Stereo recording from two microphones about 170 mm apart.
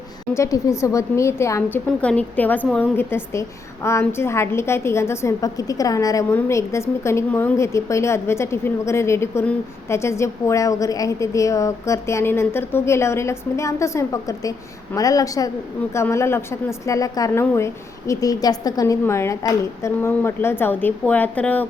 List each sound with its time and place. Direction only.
0.3 s a woman's voice: 20° left (ahead or behind)